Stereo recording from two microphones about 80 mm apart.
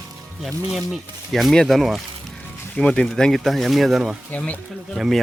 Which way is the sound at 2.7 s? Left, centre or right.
Centre.